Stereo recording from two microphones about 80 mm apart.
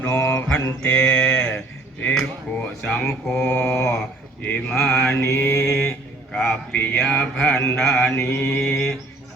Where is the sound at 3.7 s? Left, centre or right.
Left.